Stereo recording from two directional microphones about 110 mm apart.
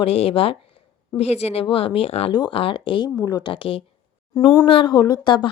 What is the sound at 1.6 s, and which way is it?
Speech, 55° left (ahead or behind).